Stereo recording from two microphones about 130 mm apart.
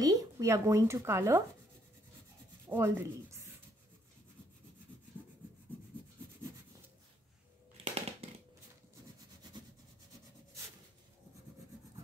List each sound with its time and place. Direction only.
0.0 s speech: 25° right (ahead or behind)
2.7 s rub: 20° right (ahead or behind)
7.7 s a sound: 50° right (ahead or behind)